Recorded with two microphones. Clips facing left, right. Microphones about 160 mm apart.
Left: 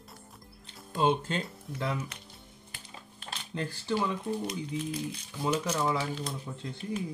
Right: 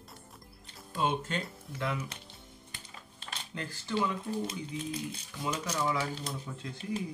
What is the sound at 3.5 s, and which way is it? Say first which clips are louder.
Speech: left 6 dB; 30° left (ahead or behind).